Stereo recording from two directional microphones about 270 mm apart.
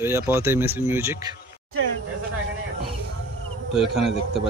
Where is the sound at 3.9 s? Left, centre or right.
Centre.